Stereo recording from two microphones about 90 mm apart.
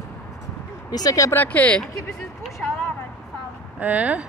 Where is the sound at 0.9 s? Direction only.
45° left (ahead or behind).